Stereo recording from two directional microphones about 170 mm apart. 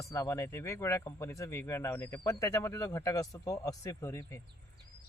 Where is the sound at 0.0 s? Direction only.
20° left (ahead or behind).